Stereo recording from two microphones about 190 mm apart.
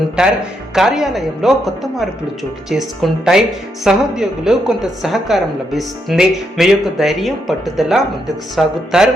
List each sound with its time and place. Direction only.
0.2 s a woman's voice: centre (ahead or behind)